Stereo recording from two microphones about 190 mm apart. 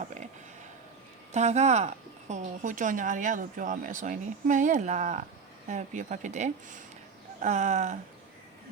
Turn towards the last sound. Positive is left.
turn(degrees=-40)  # may be behind; listen again after turning